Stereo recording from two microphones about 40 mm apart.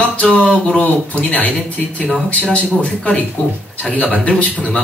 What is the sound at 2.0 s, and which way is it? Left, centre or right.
Speech, centre.